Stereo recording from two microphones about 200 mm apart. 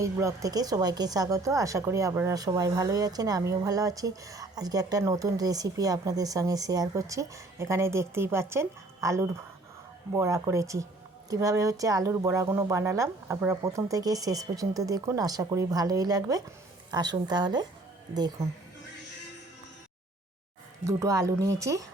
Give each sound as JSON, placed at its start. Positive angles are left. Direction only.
{"t": 0.0, "sound": "a woman's voice", "side_deg": -15}
{"t": 20.8, "sound": "speech", "side_deg": -15}